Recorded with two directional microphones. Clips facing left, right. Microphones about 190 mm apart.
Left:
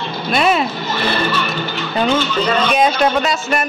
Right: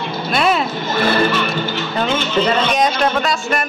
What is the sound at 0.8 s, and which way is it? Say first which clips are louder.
Speech: right 3 dB; 50° right (ahead or behind).